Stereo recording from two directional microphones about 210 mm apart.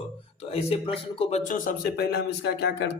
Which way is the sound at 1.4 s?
40° left (ahead or behind).